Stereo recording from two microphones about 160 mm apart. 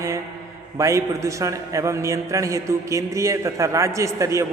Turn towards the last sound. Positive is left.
turn(degrees=-20)  # may be behind; listen again after turning